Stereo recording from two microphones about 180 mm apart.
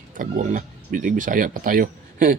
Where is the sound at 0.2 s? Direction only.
45° right (ahead or behind).